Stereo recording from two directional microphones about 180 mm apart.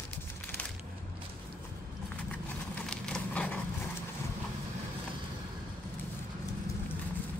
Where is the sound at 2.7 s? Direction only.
5° left (ahead or behind).